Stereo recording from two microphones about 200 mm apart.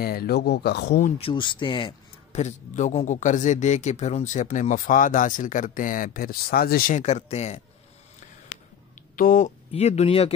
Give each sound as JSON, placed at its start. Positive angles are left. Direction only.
{"t": 0.0, "sound": "speech", "side_deg": 50}
{"t": 1.1, "sound": "speech", "side_deg": 25}
{"t": 9.1, "sound": "speech", "side_deg": 45}
{"t": 9.7, "sound": "speech", "side_deg": 30}